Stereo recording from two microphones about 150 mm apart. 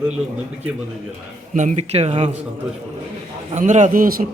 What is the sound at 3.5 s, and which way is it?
Speech, 55° right (ahead or behind).